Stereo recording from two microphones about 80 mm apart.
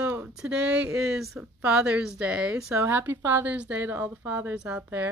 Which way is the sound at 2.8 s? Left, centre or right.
Right.